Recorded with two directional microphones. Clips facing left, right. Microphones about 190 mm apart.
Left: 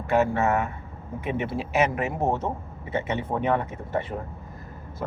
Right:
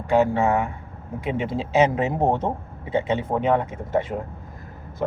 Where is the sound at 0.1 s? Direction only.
15° right (ahead or behind).